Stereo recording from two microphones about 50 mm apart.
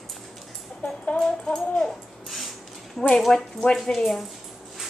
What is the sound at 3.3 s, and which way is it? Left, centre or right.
Speech, centre.